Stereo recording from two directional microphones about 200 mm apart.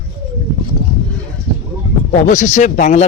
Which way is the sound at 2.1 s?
40° left (ahead or behind).